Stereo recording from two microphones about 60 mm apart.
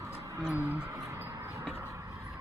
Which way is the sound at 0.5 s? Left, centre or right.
Right.